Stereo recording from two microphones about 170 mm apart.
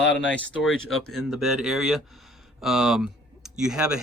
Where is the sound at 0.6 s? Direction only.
Centre (ahead or behind).